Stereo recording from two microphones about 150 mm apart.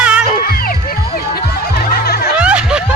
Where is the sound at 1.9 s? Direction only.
85° left.